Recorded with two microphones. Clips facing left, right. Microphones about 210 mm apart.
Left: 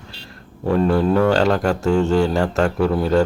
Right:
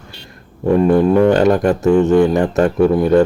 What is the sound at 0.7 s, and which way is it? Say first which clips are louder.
Speech: right 5 dB; 15° right (ahead or behind).